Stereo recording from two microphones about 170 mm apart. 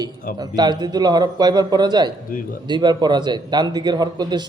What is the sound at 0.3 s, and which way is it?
A man's voice, 25° right (ahead or behind).